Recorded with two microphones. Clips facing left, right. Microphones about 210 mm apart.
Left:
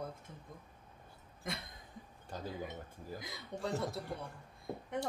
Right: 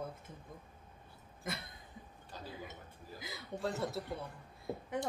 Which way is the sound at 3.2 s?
5° right (ahead or behind).